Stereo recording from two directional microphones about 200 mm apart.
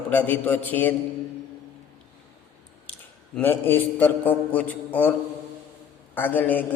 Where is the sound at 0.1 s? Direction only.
10° left (ahead or behind).